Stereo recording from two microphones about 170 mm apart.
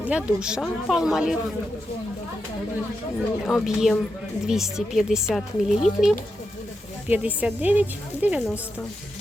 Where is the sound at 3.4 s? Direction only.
Centre (ahead or behind).